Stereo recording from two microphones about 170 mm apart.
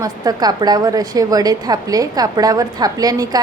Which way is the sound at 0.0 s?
25° right (ahead or behind).